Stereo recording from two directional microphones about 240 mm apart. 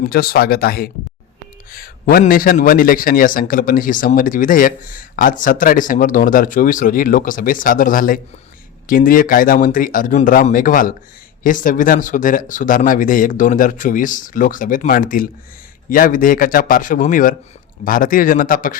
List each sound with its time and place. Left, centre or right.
0.0 s a man's voice: left